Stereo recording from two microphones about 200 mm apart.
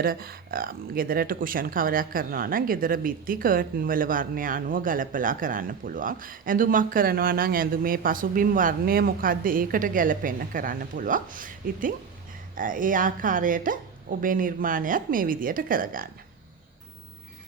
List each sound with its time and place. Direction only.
0.0 s speech: 50° right (ahead or behind)